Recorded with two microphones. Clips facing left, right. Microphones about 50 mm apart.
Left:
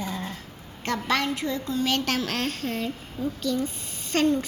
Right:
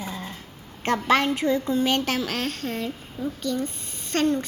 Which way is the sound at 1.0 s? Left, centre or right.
Right.